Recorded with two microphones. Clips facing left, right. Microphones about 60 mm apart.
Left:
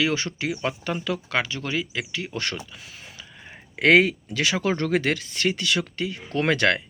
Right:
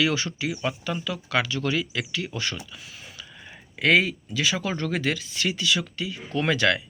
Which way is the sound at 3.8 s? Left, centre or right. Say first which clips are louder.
Left 4 dB; left.